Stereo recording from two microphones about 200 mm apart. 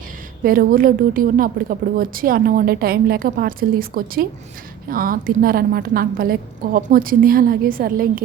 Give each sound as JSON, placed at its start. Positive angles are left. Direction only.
{"t": 0.4, "sound": "a woman's voice", "side_deg": -45}